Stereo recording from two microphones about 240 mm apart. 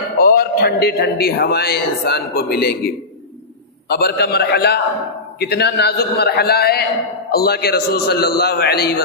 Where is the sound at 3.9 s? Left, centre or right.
Left.